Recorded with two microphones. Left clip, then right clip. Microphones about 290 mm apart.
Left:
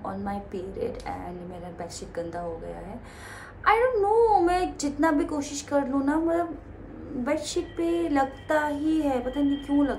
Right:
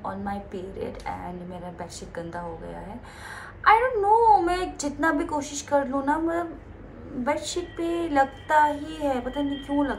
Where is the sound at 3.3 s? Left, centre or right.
Centre.